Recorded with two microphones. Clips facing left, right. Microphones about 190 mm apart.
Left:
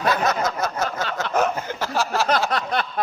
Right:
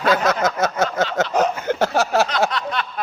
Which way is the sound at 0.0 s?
90° right.